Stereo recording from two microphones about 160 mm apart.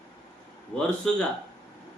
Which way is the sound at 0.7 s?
10° left (ahead or behind).